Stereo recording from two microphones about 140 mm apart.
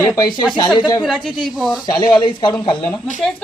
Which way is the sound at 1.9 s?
30° left (ahead or behind).